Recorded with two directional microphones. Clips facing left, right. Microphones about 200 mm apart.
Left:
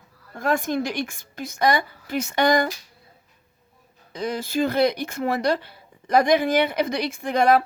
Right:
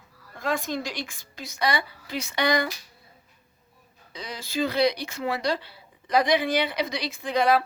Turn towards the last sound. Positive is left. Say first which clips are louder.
# left 3 dB
turn(degrees=50)  # may be behind; listen again after turning